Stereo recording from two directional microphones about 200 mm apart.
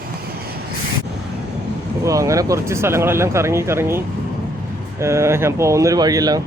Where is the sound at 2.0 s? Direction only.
15° right (ahead or behind).